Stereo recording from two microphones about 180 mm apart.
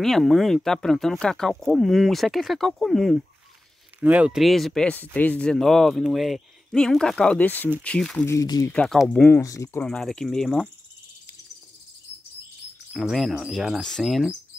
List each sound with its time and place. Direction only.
0.0 s speech: centre (ahead or behind)
8.4 s speech: 20° left (ahead or behind)
8.7 s speech: 5° left (ahead or behind)
9.4 s speech: 15° left (ahead or behind)
9.8 s speech: 5° left (ahead or behind)
12.9 s speech: centre (ahead or behind)